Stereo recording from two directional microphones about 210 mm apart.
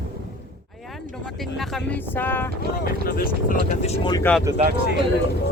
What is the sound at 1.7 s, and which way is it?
Speech, 10° left (ahead or behind).